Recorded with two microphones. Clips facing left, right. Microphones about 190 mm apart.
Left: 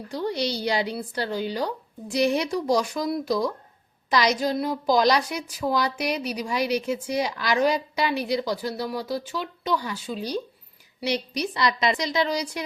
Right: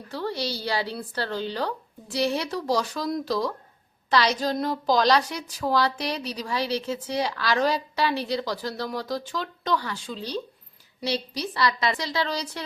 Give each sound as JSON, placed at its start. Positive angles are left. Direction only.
{"t": 0.1, "sound": "a woman's voice", "side_deg": 15}